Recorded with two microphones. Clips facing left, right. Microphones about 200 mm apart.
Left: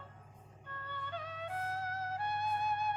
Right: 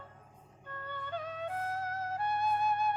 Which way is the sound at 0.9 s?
45° right (ahead or behind).